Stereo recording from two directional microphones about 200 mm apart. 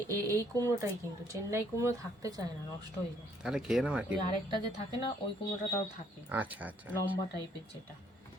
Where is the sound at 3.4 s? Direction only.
Centre (ahead or behind).